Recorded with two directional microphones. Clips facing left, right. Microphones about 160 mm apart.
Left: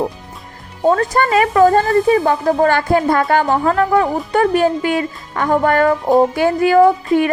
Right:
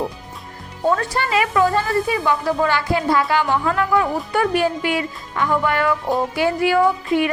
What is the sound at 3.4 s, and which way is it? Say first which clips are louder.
A woman's voice: left 5 dB; 40° left (ahead or behind).